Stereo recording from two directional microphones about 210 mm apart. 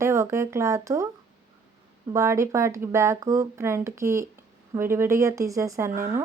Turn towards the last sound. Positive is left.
turn(degrees=-40)  # may be behind; listen again after turning